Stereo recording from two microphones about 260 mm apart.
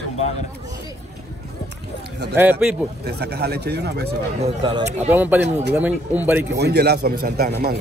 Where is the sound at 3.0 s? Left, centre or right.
Right.